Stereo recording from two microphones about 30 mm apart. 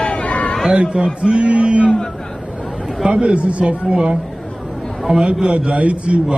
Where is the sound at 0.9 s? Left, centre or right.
Right.